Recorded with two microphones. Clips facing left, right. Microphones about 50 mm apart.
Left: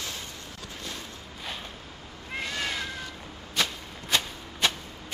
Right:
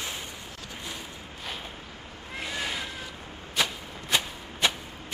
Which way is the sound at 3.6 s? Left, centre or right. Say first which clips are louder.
Right 1 dB; centre.